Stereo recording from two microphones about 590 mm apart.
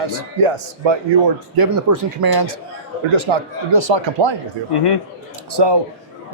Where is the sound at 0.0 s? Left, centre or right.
Right.